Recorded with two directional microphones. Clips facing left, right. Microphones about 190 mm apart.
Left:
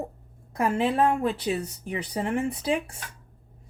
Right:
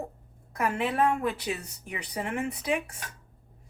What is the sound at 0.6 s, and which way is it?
Speech, 30° left (ahead or behind).